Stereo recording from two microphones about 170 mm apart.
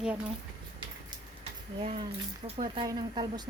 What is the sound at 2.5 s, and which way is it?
Speech, 30° right (ahead or behind).